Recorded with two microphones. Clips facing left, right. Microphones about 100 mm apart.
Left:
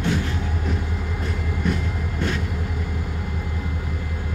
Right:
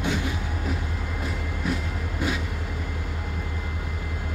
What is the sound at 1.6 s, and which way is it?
Vehicle, 5° right (ahead or behind).